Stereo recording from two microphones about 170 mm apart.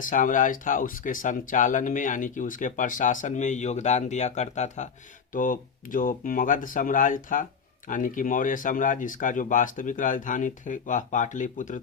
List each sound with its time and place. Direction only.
0.0 s speech: 50° left (ahead or behind)